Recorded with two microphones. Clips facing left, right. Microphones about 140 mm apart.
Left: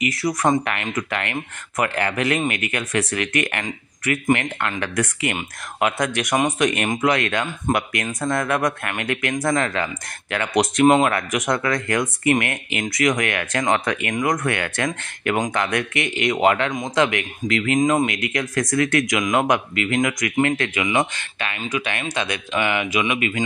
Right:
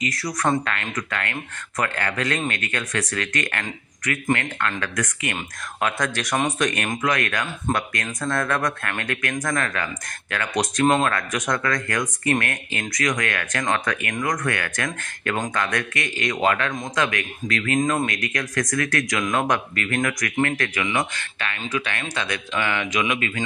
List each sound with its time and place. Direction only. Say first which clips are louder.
0.0 s speech: left 4 dB; 25° left (ahead or behind)